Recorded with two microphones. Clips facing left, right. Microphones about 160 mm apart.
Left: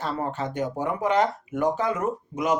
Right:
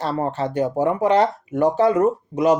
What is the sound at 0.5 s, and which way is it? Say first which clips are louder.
Speech: right 7 dB; 35° right (ahead or behind).